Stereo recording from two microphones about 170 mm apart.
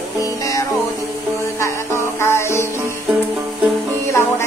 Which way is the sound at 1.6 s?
15° left (ahead or behind).